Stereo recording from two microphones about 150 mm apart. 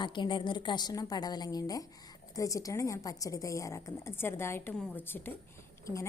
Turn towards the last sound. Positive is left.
turn(degrees=20)  # may be behind; listen again after turning